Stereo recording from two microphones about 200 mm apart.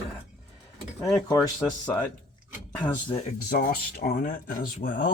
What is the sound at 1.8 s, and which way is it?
Speech, 20° left (ahead or behind).